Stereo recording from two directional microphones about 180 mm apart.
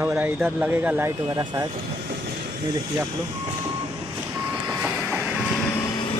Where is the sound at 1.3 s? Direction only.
20° right (ahead or behind).